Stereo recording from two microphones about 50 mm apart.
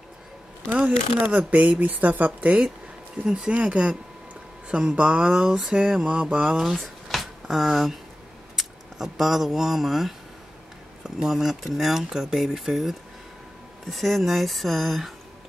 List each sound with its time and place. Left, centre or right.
0.7 s speech: right
3.3 s speech: centre
6.5 s speech: centre